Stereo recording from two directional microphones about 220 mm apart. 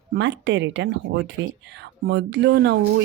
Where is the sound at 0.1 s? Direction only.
55° right (ahead or behind).